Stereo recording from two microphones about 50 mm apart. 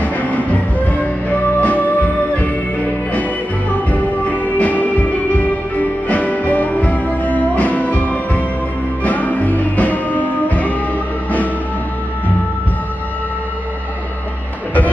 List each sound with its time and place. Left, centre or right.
0.0 s music: left
3.7 s music: left